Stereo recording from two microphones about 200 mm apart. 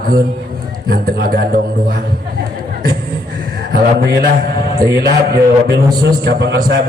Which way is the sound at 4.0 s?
45° right (ahead or behind).